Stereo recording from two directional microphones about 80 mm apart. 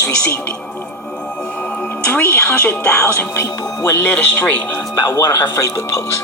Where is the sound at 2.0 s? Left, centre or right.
Left.